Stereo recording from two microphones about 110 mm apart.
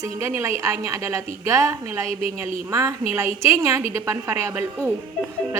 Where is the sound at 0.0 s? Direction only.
25° right (ahead or behind).